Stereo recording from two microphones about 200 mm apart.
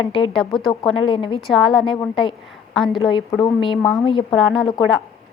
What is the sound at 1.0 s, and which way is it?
Speech, 25° left (ahead or behind).